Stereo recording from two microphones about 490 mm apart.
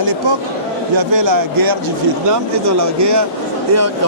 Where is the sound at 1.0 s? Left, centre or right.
Right.